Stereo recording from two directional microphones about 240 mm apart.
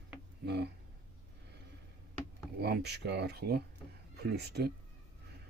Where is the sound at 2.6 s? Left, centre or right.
Right.